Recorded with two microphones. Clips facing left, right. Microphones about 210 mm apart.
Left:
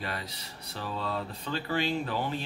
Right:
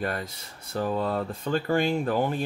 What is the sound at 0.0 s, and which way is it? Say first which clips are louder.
Speech: right 7 dB; 50° right (ahead or behind).